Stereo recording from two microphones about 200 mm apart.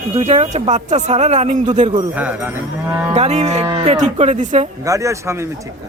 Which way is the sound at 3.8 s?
35° right (ahead or behind).